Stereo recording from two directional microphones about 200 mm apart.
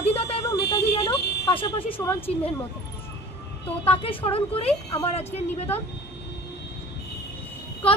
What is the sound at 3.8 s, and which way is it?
Speech, 25° left (ahead or behind).